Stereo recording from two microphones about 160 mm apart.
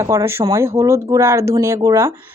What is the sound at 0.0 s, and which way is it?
Speech, 15° right (ahead or behind).